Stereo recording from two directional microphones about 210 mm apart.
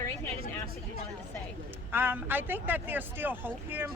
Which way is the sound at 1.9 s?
10° right (ahead or behind).